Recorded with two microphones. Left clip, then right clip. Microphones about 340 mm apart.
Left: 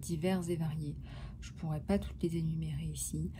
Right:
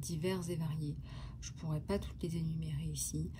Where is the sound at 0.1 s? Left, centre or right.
Centre.